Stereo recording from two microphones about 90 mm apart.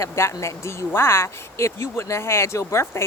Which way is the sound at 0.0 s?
30° left (ahead or behind).